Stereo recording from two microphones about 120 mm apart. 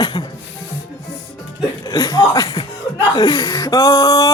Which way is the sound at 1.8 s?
30° left (ahead or behind).